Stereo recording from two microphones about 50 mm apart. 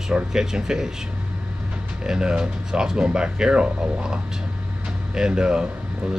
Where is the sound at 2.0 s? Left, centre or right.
Centre.